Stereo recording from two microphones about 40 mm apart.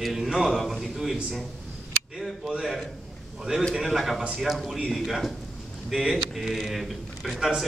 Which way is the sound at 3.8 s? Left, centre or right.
Centre.